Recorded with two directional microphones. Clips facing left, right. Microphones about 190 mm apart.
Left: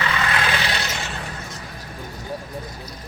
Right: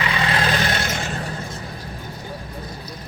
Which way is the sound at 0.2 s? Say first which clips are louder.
Right 2 dB; 30° right (ahead or behind).